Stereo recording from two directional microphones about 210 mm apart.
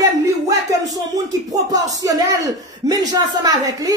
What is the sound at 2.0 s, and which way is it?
Speech, 15° right (ahead or behind).